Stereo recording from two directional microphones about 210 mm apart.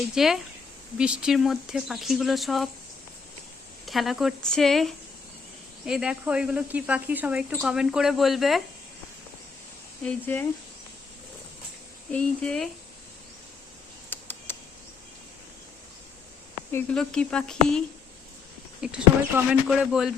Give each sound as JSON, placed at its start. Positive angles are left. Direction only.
{"t": 0.1, "sound": "speech", "side_deg": 0}
{"t": 3.8, "sound": "speech", "side_deg": 0}
{"t": 10.0, "sound": "speech", "side_deg": 5}
{"t": 12.1, "sound": "speech", "side_deg": 5}
{"t": 14.1, "sound": "typing", "side_deg": 10}
{"t": 16.7, "sound": "speech", "side_deg": 5}